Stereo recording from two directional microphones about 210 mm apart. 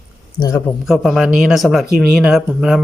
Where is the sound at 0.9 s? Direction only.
Centre (ahead or behind).